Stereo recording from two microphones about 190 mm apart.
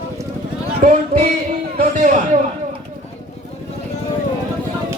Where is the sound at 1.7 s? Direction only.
40° right (ahead or behind).